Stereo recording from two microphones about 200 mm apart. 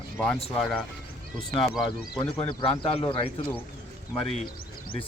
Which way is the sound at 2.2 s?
25° left (ahead or behind).